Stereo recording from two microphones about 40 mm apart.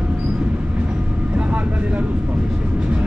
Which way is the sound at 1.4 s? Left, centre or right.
Right.